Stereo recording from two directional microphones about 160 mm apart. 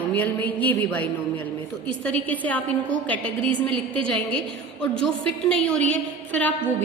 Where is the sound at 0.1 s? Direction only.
10° left (ahead or behind).